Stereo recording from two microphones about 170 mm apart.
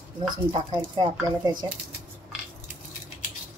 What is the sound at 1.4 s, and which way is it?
Speech, 25° right (ahead or behind).